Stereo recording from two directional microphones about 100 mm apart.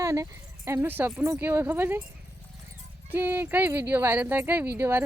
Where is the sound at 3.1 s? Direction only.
20° right (ahead or behind).